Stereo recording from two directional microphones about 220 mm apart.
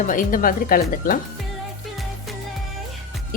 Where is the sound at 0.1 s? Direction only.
40° left (ahead or behind).